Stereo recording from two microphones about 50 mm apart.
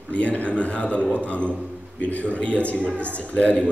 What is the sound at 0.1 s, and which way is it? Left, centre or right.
A man's voice, left.